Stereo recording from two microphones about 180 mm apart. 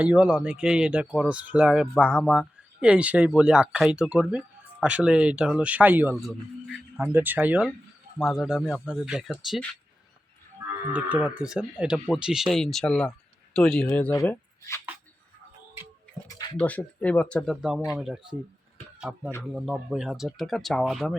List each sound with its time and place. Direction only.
0.0 s speech: 10° right (ahead or behind)
10.9 s speech: 5° right (ahead or behind); by 14.8 s 15° left (ahead or behind)
16.6 s speech: 10° left (ahead or behind)